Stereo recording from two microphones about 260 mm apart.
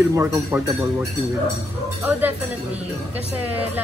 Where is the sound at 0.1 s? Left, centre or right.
Centre.